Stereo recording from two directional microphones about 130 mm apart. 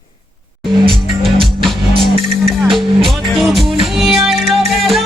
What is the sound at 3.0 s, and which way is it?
Speech, centre (ahead or behind).